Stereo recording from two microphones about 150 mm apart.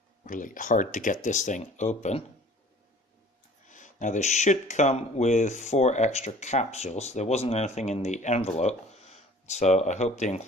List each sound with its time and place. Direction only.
0.2 s speech: 60° left (ahead or behind)
3.6 s speech: 55° left (ahead or behind)